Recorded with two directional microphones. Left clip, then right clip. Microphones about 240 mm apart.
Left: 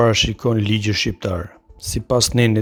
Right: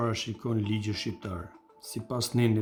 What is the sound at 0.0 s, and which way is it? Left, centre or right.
Speech, left.